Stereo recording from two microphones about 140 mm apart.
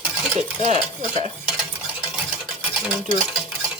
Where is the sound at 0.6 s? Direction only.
60° right (ahead or behind).